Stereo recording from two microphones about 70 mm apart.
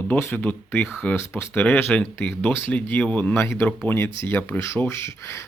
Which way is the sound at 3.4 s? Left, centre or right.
Left.